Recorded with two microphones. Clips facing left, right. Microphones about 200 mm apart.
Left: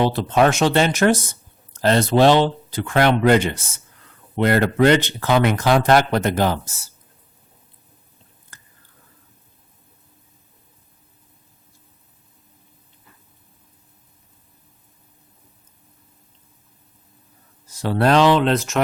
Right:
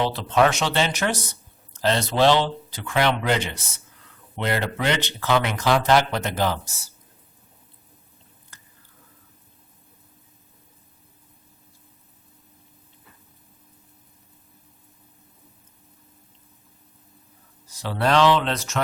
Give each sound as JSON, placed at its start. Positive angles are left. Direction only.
{"t": 0.1, "sound": "speech", "side_deg": 50}
{"t": 17.8, "sound": "speech", "side_deg": 45}